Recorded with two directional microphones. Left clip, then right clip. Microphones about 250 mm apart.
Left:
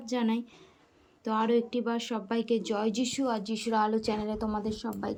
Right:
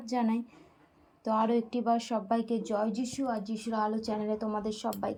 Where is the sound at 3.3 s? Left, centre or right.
Left.